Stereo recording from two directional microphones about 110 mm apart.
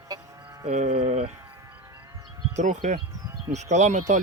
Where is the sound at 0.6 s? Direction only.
85° right.